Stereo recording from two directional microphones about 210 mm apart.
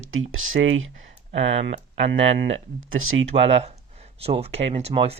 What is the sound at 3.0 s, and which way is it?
Speech, 75° right (ahead or behind).